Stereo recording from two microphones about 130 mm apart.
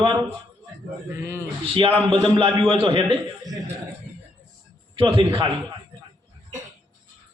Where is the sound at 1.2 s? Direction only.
15° right (ahead or behind).